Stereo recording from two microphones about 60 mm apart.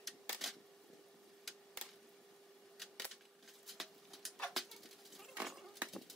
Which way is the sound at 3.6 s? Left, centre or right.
Centre.